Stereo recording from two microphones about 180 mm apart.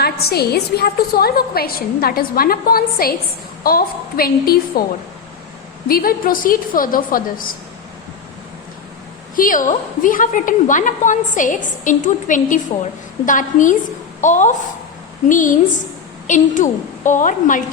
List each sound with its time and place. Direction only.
0.0 s a woman's voice: 60° left (ahead or behind)
5.9 s a woman's voice: 55° left (ahead or behind)
9.3 s a woman's voice: 50° left (ahead or behind)